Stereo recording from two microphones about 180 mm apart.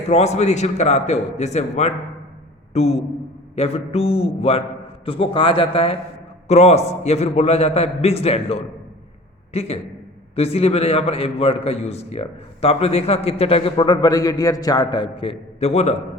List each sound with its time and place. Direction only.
0.1 s a man's voice: 40° left (ahead or behind)